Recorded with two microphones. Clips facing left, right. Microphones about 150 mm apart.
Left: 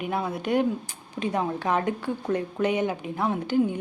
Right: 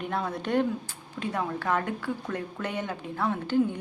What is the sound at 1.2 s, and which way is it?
A woman's voice, 20° left (ahead or behind).